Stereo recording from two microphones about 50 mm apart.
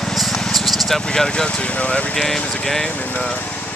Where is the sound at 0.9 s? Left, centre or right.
Centre.